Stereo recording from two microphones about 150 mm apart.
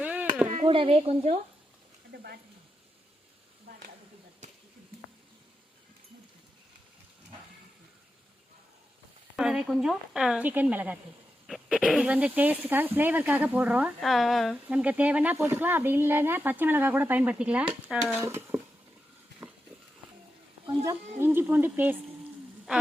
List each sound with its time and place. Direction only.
0.0 s a sound: 10° right (ahead or behind)
0.4 s a sound: 50° right (ahead or behind)
0.7 s a woman's voice: 35° right (ahead or behind)
9.3 s speech: 5° right (ahead or behind)
11.4 s speech: centre (ahead or behind)
18.2 s speech: 15° right (ahead or behind)
21.2 s speech: 15° right (ahead or behind)